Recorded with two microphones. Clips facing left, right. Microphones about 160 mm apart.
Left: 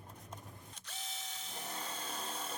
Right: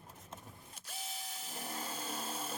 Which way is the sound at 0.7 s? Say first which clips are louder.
Right 3 dB; 10° right (ahead or behind).